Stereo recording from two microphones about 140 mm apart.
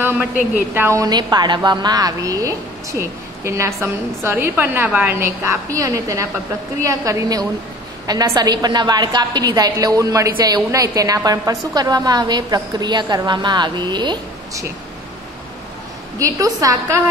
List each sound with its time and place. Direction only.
0.7 s a woman's voice: 20° right (ahead or behind)
16.2 s a woman's voice: 25° right (ahead or behind)